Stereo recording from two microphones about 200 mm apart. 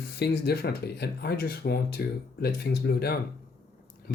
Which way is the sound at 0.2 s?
55° left (ahead or behind).